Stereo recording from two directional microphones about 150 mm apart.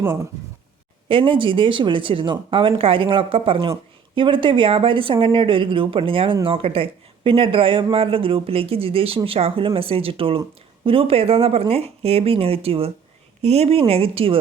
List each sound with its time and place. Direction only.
1.0 s speech: 35° right (ahead or behind)